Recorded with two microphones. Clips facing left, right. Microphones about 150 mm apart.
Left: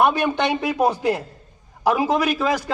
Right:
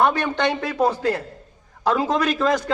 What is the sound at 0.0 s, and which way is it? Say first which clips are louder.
A man's voice: left 1 dB; 10° left (ahead or behind).